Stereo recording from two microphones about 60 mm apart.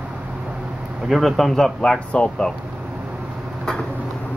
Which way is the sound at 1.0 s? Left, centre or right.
Centre.